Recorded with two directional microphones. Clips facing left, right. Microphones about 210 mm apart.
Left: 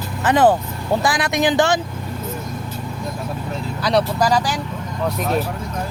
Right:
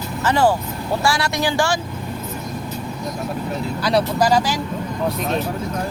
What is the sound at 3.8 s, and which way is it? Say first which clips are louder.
Speech: even; centre (ahead or behind).